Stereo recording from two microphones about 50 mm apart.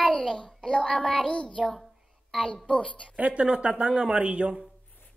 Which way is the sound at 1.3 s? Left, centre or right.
Left.